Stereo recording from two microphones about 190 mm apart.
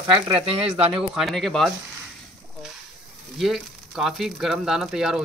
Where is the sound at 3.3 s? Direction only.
Centre (ahead or behind).